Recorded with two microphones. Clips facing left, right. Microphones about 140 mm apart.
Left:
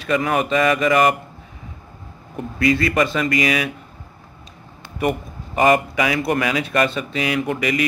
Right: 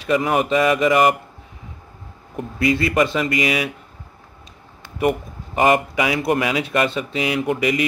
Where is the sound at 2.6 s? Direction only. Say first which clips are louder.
Even; 20° right (ahead or behind).